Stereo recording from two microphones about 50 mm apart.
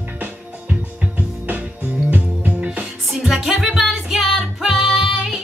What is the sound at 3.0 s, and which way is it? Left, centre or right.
Music, centre.